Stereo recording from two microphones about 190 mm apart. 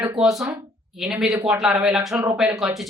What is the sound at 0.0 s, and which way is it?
A woman's voice, 5° right (ahead or behind).